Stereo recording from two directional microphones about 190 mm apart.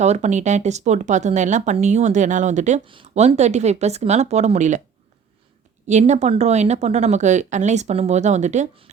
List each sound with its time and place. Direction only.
0.0 s speech: 35° right (ahead or behind)
2.8 s speech: 30° right (ahead or behind)
5.8 s speech: 40° right (ahead or behind)